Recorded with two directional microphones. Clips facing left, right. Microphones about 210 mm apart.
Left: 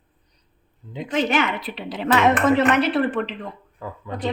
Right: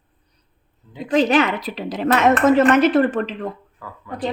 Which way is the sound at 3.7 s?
25° left (ahead or behind).